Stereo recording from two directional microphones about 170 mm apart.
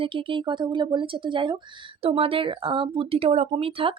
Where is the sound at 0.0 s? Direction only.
30° right (ahead or behind).